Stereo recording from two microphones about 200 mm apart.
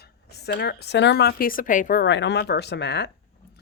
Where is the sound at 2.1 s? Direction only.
60° left (ahead or behind).